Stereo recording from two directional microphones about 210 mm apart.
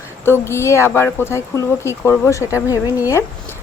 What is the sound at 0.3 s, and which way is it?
Speech, 10° left (ahead or behind).